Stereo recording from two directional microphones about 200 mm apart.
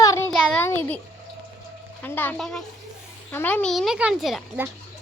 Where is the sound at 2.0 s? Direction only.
10° left (ahead or behind).